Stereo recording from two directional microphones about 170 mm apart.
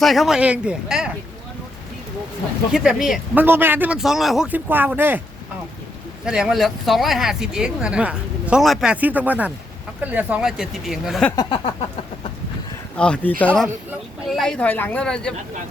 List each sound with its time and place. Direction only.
0.0 s speech: centre (ahead or behind)
2.7 s speech: 5° right (ahead or behind)
6.2 s speech: 5° right (ahead or behind)
11.3 s a sound: 25° left (ahead or behind)
13.0 s speech: 5° left (ahead or behind)